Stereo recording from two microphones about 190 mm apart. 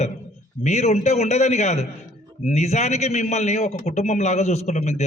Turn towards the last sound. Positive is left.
turn(degrees=35)  # may be behind; listen again after turning